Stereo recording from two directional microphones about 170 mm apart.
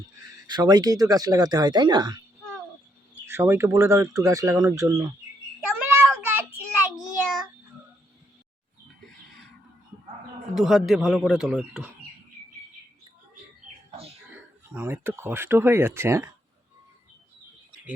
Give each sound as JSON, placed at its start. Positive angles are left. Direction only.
{"t": 0.4, "sound": "speech", "side_deg": -25}
{"t": 3.2, "sound": "speech", "side_deg": -15}
{"t": 5.5, "sound": "child singing", "side_deg": -5}
{"t": 10.5, "sound": "a man's voice", "side_deg": 0}
{"t": 13.9, "sound": "a sound", "side_deg": -35}
{"t": 14.7, "sound": "speech", "side_deg": -10}